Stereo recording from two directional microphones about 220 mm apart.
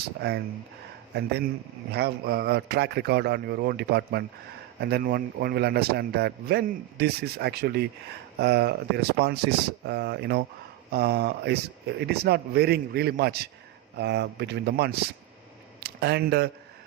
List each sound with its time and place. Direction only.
0.2 s a man's voice: 50° right (ahead or behind)